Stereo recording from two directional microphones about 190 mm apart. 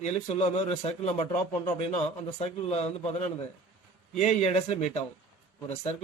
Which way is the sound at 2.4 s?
35° left (ahead or behind).